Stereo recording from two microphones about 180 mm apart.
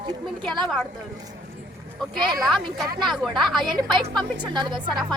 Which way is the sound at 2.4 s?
Centre (ahead or behind).